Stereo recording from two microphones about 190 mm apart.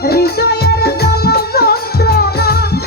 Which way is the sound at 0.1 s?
55° left (ahead or behind).